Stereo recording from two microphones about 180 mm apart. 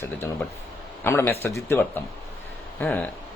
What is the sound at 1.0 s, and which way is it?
A man's voice, 15° left (ahead or behind).